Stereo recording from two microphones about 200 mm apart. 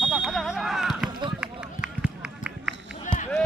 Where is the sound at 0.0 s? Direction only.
5° right (ahead or behind).